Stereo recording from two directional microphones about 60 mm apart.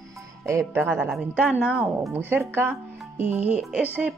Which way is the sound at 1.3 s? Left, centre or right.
Centre.